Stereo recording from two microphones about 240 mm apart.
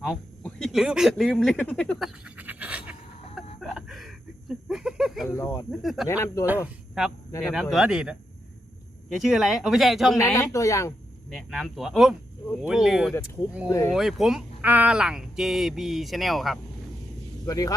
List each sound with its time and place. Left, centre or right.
0.0 s speech: centre
3.6 s a sound: centre
5.3 s speech: centre
5.8 s speech: centre
6.1 s speech: centre
7.5 s speech: centre
10.2 s speech: centre
11.3 s speech: centre
13.7 s speech: centre
13.9 s speech: centre
17.4 s speech: centre